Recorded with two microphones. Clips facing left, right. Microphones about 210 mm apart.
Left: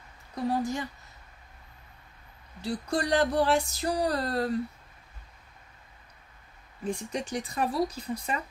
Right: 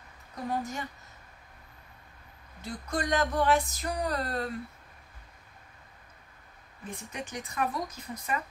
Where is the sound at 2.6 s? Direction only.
30° left (ahead or behind).